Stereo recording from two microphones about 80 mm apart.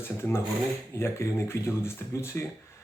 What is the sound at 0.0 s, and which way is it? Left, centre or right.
Speech, left.